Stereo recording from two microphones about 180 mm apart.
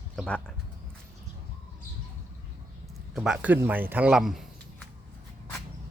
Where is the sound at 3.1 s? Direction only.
5° right (ahead or behind).